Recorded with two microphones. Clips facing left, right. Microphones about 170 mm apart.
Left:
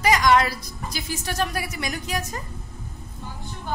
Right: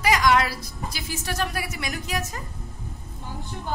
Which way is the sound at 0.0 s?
Centre (ahead or behind).